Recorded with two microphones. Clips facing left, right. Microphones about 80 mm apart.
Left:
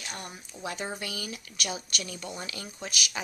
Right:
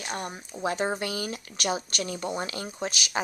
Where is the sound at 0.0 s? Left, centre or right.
Right.